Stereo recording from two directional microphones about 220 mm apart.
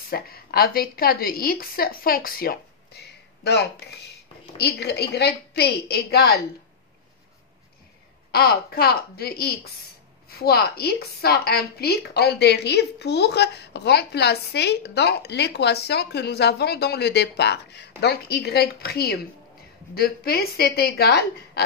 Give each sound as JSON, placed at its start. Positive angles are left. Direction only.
{"t": 0.1, "sound": "a woman's voice", "side_deg": 45}
{"t": 8.3, "sound": "a woman's voice", "side_deg": 45}